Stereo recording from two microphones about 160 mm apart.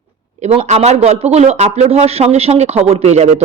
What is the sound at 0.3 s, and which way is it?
A woman's voice, 45° right (ahead or behind).